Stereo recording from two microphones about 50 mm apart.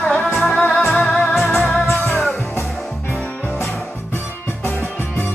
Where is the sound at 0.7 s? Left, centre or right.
Left.